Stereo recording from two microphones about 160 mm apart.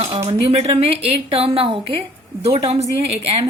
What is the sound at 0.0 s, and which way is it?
A woman's voice, 40° right (ahead or behind).